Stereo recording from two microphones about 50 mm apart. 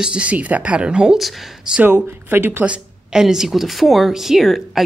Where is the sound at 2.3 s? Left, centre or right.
Right.